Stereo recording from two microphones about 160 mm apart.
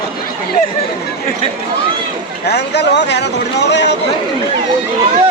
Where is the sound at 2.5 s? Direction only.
90° left.